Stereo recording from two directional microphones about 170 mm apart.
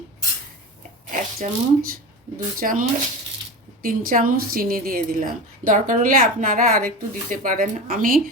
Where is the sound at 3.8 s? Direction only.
55° right (ahead or behind).